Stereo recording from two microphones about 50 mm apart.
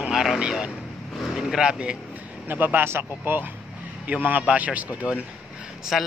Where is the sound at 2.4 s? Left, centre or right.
Right.